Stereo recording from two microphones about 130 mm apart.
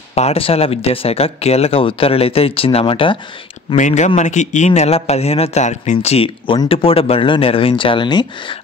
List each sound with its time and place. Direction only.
0.1 s speech: 50° left (ahead or behind)
3.7 s a man's voice: 70° left (ahead or behind); by 8.5 s 35° left (ahead or behind)